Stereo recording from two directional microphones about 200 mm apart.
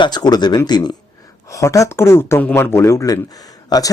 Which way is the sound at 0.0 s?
20° left (ahead or behind).